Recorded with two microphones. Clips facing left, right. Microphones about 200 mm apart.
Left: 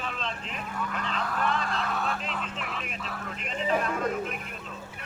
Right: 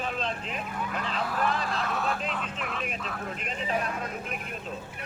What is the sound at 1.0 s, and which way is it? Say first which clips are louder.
Speech: right 2 dB; 5° right (ahead or behind).